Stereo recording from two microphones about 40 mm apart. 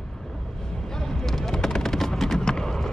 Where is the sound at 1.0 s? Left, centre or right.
Centre.